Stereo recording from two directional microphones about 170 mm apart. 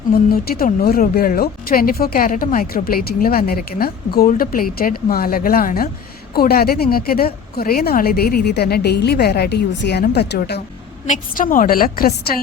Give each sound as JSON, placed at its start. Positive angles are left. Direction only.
{"t": 0.1, "sound": "speech", "side_deg": 60}
{"t": 11.0, "sound": "speech", "side_deg": 50}